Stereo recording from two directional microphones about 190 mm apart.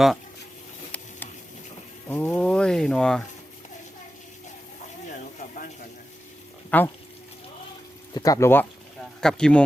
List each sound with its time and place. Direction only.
2.0 s speech: 10° left (ahead or behind)
6.7 s speech: 10° left (ahead or behind)
8.1 s speech: 20° left (ahead or behind)